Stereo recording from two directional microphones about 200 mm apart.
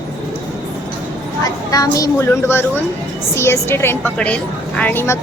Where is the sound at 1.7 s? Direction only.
15° left (ahead or behind).